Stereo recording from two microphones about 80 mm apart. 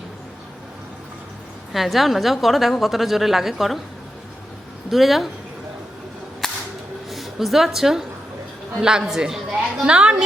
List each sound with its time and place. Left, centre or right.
1.7 s a woman's voice: centre
4.9 s a woman's voice: centre
6.4 s whip: centre
7.1 s a woman's voice: centre